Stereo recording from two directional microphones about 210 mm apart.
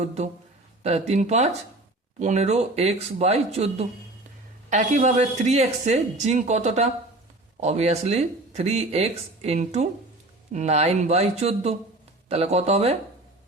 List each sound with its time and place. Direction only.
0.0 s speech: 30° right (ahead or behind)